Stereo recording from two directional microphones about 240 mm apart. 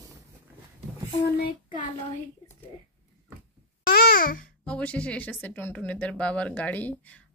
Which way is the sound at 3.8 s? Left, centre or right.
Left.